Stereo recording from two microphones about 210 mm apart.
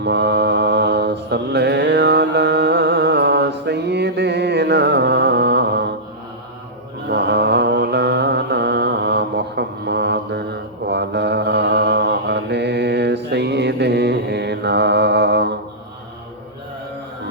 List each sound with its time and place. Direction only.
0.0 s mantra: 55° right (ahead or behind)
7.1 s mantra: 55° right (ahead or behind)